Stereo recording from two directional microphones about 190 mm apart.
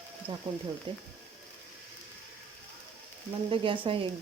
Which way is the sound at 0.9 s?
25° right (ahead or behind).